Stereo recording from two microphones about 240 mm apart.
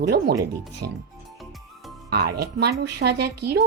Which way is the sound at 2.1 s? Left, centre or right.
Right.